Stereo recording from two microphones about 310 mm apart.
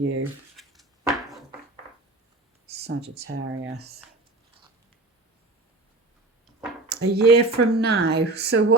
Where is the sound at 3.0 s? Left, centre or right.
Right.